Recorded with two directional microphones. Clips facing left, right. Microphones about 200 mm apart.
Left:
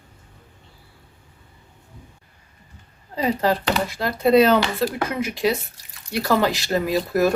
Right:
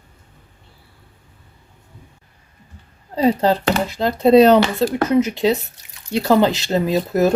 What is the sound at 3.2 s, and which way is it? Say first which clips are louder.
Speech: right 5 dB; 30° right (ahead or behind).